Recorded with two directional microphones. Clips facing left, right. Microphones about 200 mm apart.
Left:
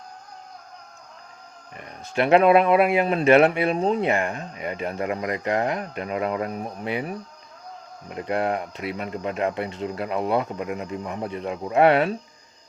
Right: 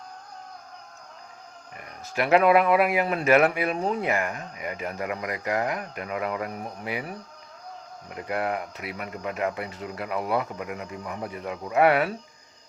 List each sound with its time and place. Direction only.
1.7 s speech: 25° left (ahead or behind)